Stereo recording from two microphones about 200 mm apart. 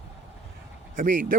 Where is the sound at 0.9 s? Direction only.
45° right (ahead or behind).